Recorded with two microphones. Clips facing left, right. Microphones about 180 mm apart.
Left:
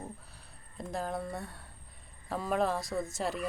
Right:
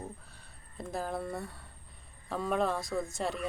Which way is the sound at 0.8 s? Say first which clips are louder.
Even; centre (ahead or behind).